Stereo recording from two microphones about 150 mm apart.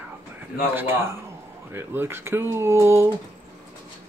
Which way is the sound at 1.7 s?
15° right (ahead or behind).